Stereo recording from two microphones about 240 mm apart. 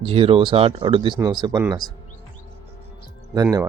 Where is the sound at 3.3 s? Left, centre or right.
Centre.